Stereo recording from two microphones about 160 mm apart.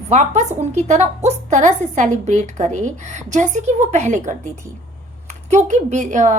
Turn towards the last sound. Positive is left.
turn(degrees=-50)  # may be behind; listen again after turning